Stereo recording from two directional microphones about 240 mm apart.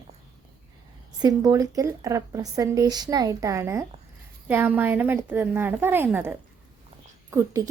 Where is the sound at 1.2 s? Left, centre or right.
Centre.